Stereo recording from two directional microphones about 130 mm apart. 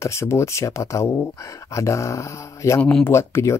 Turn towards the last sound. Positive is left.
turn(degrees=20)  # may be behind; listen again after turning